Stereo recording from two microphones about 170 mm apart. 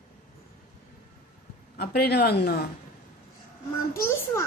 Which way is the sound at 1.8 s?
70° left (ahead or behind).